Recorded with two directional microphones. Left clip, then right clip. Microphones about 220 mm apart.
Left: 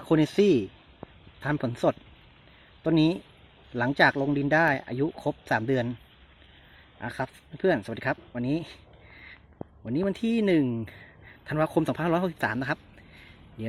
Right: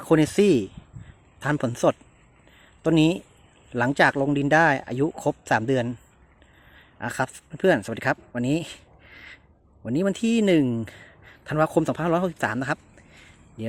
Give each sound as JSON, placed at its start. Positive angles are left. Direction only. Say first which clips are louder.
{"t": 0.0, "sound": "speech", "louder": "right 3 dB", "side_deg": -15}
{"t": 7.0, "sound": "speech", "louder": "right 6 dB", "side_deg": -25}